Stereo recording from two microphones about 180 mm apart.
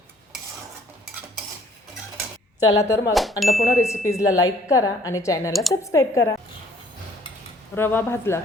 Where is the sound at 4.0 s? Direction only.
15° left (ahead or behind).